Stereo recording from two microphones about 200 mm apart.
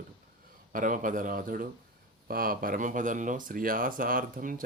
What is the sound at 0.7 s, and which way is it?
Speech, 40° right (ahead or behind).